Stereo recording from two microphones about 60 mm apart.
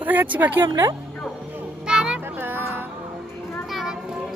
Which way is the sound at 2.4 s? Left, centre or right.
Right.